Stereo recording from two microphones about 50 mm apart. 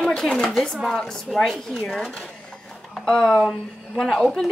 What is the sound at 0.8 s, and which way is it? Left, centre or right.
Speech, centre.